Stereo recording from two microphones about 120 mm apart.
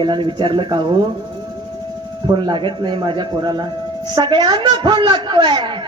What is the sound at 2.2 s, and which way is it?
A man's voice, 45° right (ahead or behind).